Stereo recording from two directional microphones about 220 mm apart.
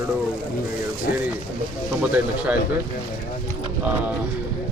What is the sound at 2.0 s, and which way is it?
Speech, 5° right (ahead or behind).